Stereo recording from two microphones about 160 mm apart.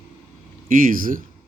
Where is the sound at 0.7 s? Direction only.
60° right (ahead or behind).